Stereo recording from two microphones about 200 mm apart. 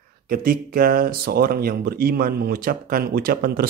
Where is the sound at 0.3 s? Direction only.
45° right (ahead or behind).